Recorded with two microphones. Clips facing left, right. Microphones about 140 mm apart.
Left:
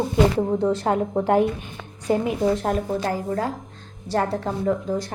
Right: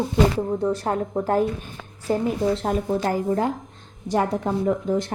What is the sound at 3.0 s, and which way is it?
A woman's voice, 25° right (ahead or behind).